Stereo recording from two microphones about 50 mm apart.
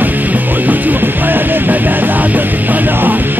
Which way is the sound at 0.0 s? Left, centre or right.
Right.